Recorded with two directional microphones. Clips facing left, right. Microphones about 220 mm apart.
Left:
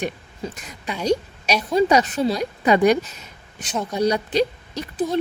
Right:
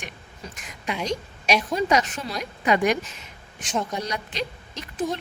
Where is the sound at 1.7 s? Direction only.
35° left (ahead or behind).